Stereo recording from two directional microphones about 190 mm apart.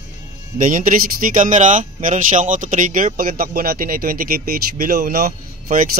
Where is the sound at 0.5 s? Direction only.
45° right (ahead or behind).